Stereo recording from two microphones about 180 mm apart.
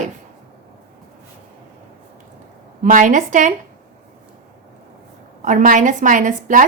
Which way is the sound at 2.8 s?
45° right (ahead or behind).